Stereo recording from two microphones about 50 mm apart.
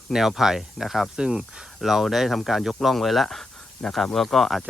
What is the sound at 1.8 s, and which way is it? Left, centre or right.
Speech, centre.